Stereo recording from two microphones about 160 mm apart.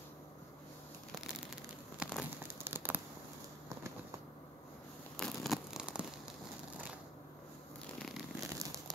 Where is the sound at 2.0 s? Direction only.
5° right (ahead or behind).